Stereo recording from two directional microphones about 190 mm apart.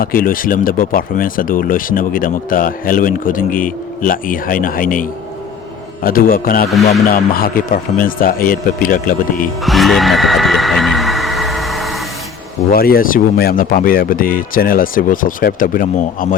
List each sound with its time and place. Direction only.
0.0 s speech: 50° left (ahead or behind)
9.6 s music: centre (ahead or behind)
12.7 s speech: 50° left (ahead or behind)